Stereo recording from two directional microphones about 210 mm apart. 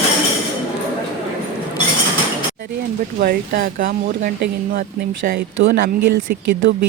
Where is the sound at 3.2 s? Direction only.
45° right (ahead or behind).